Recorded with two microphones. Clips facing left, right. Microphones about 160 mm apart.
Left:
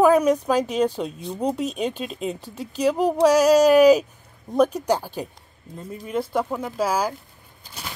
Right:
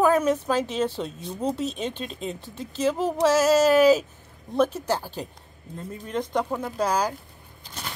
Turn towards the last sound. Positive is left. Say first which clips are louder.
# left 1 dB
turn(degrees=5)  # may be behind; listen again after turning